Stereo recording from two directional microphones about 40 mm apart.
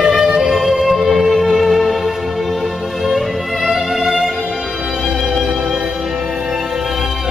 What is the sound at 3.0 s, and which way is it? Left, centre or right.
Music, centre.